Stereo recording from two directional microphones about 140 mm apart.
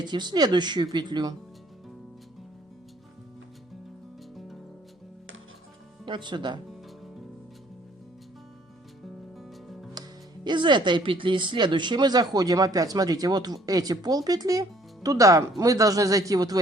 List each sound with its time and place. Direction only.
0.0 s speech: 30° right (ahead or behind)
6.1 s speech: 35° right (ahead or behind)
10.0 s music: 30° right (ahead or behind)
10.4 s speech: 35° right (ahead or behind)